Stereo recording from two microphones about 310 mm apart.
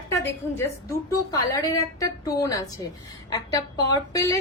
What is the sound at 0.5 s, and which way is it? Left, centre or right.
A woman's voice, centre.